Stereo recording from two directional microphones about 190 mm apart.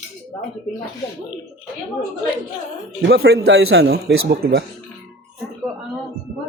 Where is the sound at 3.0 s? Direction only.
55° right (ahead or behind).